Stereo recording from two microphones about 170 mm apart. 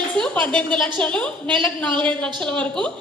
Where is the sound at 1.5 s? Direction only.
30° right (ahead or behind).